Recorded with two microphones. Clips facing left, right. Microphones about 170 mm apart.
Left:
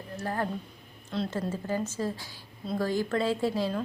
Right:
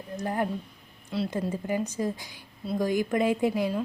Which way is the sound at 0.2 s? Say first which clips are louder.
Right 3 dB; 15° right (ahead or behind).